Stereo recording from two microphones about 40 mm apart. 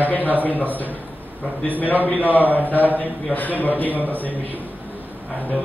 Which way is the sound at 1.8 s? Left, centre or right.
Left.